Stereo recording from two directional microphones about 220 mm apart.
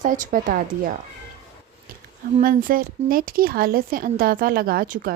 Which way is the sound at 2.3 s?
40° right (ahead or behind).